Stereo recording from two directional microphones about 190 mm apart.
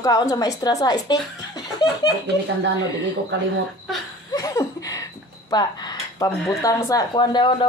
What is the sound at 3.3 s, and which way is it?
Speech, 70° right (ahead or behind).